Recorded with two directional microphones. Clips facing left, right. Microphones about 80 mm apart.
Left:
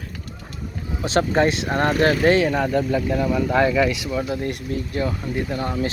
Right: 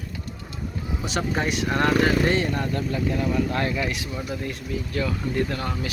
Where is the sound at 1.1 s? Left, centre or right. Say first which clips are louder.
Left 8 dB; left.